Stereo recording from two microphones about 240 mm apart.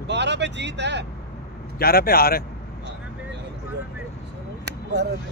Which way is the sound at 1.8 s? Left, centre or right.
Left.